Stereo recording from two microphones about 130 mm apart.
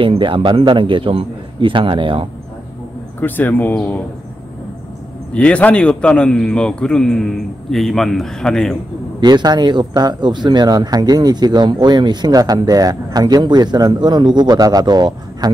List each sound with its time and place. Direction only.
0.0 s speech: 40° right (ahead or behind)
3.2 s a man's voice: 15° left (ahead or behind)
5.3 s a man's voice: 10° left (ahead or behind)
9.2 s speech: 35° right (ahead or behind)